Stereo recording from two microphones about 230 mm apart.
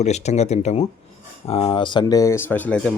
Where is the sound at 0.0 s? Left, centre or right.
Left.